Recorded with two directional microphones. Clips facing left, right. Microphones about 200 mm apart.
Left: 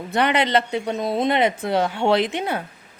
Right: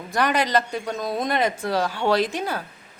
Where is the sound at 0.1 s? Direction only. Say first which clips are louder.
Left 2 dB; 25° left (ahead or behind).